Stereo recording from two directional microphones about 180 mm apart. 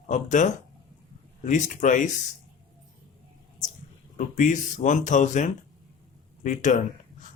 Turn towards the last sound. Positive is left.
turn(degrees=40)  # may be behind; listen again after turning